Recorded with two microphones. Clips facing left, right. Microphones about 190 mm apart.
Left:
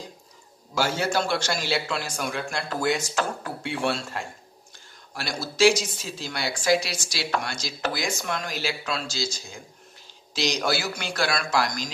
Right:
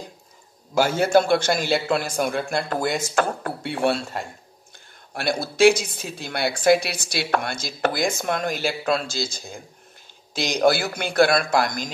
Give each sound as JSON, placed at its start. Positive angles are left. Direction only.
{"t": 0.7, "sound": "a woman's voice", "side_deg": -55}
{"t": 5.1, "sound": "a woman's voice", "side_deg": -55}